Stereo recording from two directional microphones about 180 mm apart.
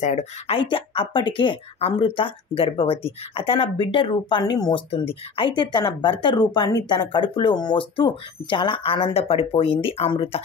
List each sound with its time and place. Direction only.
0.0 s speech: 40° left (ahead or behind)